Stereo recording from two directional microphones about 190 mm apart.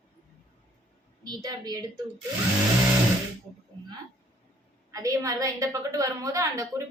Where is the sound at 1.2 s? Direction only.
20° right (ahead or behind).